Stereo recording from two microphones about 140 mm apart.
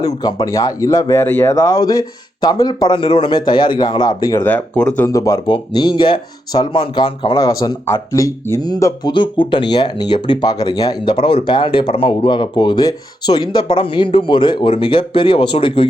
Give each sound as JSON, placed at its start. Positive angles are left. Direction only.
{"t": 0.0, "sound": "speech", "side_deg": 30}
{"t": 4.4, "sound": "speech", "side_deg": 10}
{"t": 5.0, "sound": "speech", "side_deg": 20}
{"t": 5.5, "sound": "speech", "side_deg": 30}